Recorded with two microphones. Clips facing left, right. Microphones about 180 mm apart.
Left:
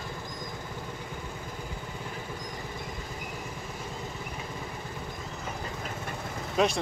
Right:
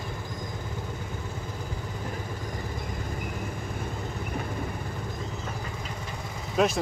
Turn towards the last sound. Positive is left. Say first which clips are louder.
# right 2 dB
turn(degrees=0)  # may be behind; listen again after turning